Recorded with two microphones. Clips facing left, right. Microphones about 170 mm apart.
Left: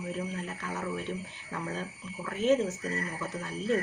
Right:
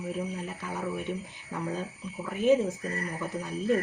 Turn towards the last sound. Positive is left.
turn(degrees=-15)  # may be behind; listen again after turning